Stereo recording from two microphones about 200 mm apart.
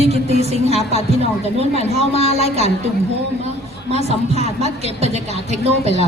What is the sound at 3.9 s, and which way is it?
A woman's voice, 30° right (ahead or behind).